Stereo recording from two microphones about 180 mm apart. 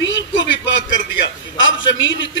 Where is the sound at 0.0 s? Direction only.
90° left.